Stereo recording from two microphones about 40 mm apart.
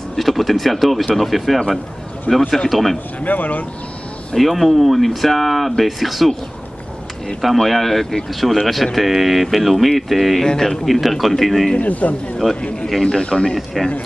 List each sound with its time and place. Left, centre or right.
0.1 s speech: centre
2.3 s speech: left
2.7 s speech: centre
3.2 s speech: left
4.4 s speech: centre
7.5 s speech: centre
10.4 s speech: centre
11.8 s speech: left
12.4 s speech: centre